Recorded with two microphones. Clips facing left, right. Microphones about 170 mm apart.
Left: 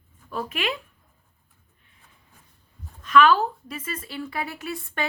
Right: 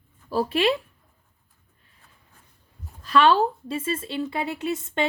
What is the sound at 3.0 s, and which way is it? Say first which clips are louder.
A woman's voice: even; 35° right (ahead or behind).